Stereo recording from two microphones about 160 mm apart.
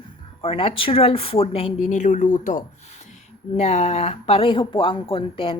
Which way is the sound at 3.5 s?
45° left (ahead or behind).